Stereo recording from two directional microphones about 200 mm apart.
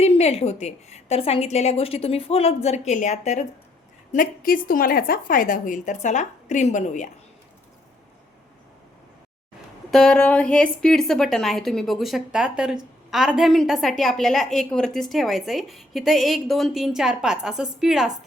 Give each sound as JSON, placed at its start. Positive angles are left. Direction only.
{"t": 0.0, "sound": "a woman's voice", "side_deg": 30}
{"t": 9.9, "sound": "a woman's voice", "side_deg": 5}